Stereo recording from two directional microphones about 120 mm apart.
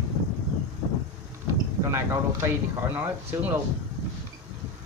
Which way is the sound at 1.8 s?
25° right (ahead or behind).